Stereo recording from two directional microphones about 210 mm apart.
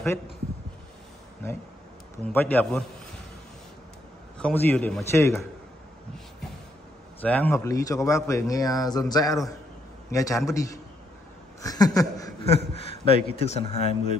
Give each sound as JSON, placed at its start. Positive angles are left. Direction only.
{"t": 2.2, "sound": "speech", "side_deg": 10}
{"t": 4.4, "sound": "speech", "side_deg": 5}
{"t": 7.2, "sound": "speech", "side_deg": 5}
{"t": 12.5, "sound": "a man's voice", "side_deg": 30}